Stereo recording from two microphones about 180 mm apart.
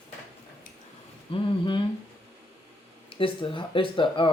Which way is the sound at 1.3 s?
25° left (ahead or behind).